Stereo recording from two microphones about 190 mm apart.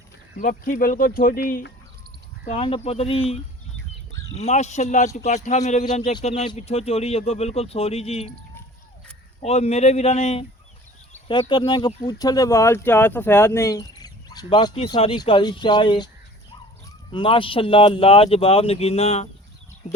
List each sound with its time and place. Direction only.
0.3 s speech: 45° left (ahead or behind)
2.4 s speech: 30° left (ahead or behind)
9.4 s speech: 35° left (ahead or behind)
17.1 s speech: 25° left (ahead or behind)